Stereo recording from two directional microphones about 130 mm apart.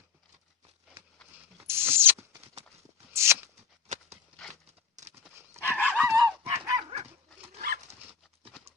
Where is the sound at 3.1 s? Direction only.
20° right (ahead or behind).